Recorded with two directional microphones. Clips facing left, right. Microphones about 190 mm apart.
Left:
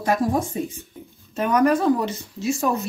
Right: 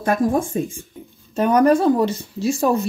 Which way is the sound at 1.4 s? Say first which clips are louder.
Right 4 dB; 35° right (ahead or behind).